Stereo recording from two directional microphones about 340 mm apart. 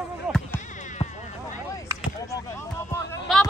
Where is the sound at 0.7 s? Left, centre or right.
Left.